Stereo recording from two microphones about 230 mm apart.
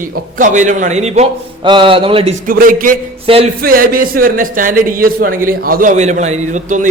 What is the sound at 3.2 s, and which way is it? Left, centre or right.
Speech, right.